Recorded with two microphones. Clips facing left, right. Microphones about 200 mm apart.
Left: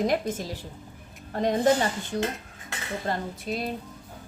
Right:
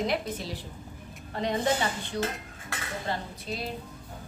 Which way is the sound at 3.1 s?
45° left (ahead or behind).